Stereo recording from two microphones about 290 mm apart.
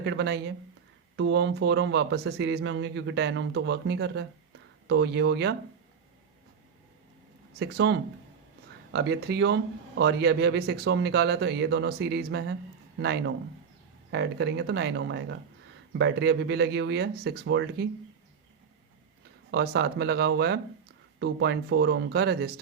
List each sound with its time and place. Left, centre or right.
0.0 s speech: right
7.6 s speech: right
19.5 s speech: right